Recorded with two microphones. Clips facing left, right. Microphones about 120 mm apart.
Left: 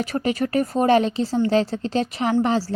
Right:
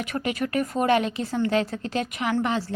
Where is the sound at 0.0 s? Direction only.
35° left (ahead or behind).